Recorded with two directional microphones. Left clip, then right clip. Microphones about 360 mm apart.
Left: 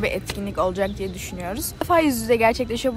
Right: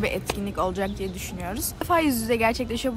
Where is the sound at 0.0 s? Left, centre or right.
Centre.